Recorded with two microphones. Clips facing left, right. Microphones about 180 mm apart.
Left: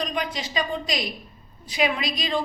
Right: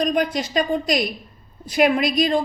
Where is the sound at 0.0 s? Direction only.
50° right (ahead or behind).